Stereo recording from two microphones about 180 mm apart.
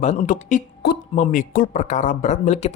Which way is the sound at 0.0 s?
45° left (ahead or behind).